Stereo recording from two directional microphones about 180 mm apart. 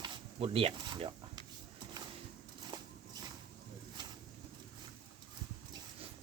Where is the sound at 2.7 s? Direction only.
25° right (ahead or behind).